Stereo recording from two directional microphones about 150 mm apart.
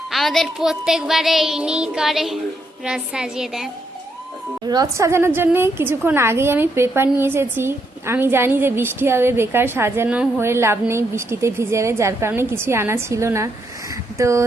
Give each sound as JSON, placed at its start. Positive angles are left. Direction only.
{"t": 0.1, "sound": "child singing", "side_deg": 0}
{"t": 4.7, "sound": "a woman's voice", "side_deg": -25}